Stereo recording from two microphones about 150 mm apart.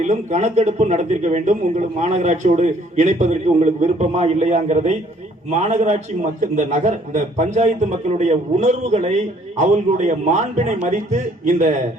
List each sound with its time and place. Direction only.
0.0 s speech: 50° right (ahead or behind)